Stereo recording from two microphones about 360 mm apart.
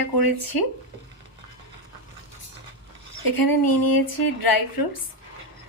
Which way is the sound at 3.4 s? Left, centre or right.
Left.